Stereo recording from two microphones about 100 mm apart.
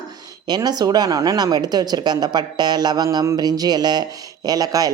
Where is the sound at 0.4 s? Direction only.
45° right (ahead or behind).